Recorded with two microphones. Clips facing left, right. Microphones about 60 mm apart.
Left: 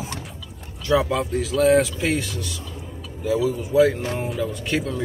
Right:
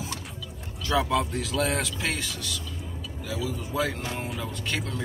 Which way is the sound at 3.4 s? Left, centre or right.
Centre.